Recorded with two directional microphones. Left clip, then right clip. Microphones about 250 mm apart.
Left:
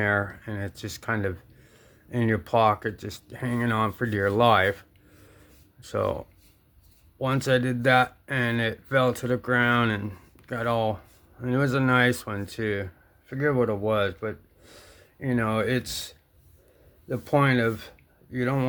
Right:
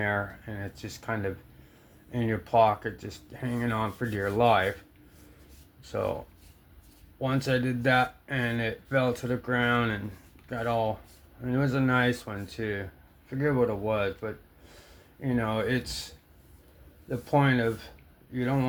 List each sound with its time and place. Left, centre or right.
0.0 s speech: left
5.8 s speech: left
7.2 s speech: left